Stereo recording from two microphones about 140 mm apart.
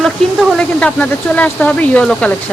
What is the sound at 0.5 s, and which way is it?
Speech, 10° left (ahead or behind).